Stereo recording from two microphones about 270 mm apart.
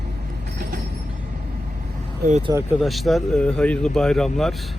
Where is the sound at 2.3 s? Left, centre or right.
Centre.